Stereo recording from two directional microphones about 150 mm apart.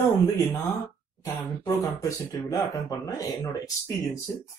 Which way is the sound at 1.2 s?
20° left (ahead or behind).